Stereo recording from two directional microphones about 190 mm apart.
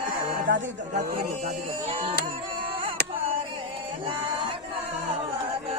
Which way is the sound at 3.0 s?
60° right (ahead or behind).